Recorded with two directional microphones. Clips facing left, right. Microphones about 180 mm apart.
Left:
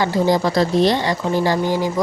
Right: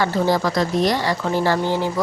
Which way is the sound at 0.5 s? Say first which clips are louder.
Left 3 dB; 30° left (ahead or behind).